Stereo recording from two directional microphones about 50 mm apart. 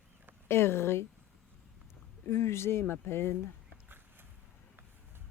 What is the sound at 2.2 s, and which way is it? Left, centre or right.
Speech, left.